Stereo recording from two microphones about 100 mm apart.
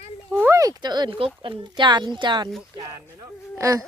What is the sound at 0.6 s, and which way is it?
Speech, 40° right (ahead or behind).